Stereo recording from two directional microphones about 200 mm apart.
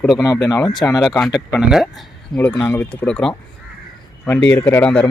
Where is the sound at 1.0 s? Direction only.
Centre (ahead or behind).